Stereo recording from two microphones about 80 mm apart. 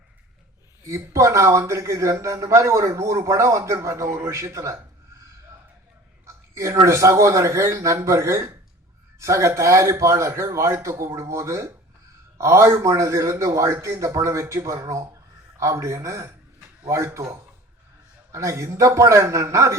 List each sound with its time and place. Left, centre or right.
0.9 s a man's voice: right
6.2 s a sound: right
6.8 s a man's voice: right